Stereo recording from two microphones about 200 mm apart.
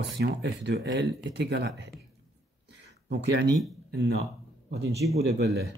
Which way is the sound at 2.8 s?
60° right (ahead or behind).